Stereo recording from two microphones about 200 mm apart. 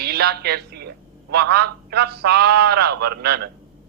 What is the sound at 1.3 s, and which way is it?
A man's voice, 55° right (ahead or behind).